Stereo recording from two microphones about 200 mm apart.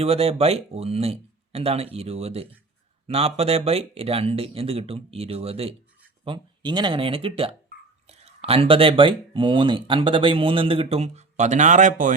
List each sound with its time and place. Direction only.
0.0 s speech: 30° right (ahead or behind)